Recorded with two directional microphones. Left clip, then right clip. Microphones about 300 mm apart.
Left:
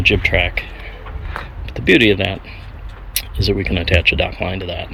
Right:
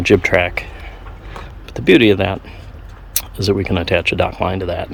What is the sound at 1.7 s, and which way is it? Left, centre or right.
Speech, centre.